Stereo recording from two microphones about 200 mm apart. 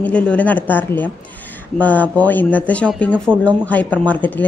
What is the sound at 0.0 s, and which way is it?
A child's voice, 5° left (ahead or behind).